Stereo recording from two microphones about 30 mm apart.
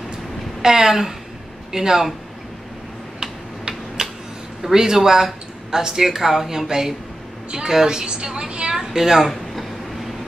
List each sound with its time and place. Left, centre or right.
0.6 s speech: centre
3.2 s tick-tock: right
4.6 s a man's voice: centre; by 8.7 s right
8.7 s a woman's voice: centre
9.3 s a sound: centre